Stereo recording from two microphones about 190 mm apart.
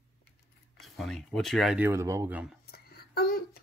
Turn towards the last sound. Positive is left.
turn(degrees=55)  # may be behind; listen again after turning